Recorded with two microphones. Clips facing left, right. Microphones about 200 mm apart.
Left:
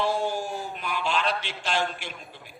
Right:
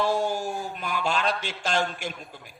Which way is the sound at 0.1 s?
45° right (ahead or behind).